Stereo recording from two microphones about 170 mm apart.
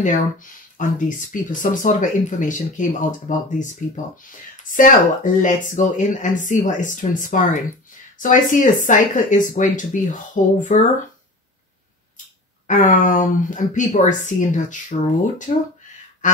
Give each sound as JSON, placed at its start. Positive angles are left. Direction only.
{"t": 0.0, "sound": "speech", "side_deg": 50}
{"t": 12.6, "sound": "speech", "side_deg": 50}